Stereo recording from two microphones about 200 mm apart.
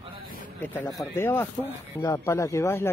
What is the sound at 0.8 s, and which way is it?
Speech, 15° left (ahead or behind).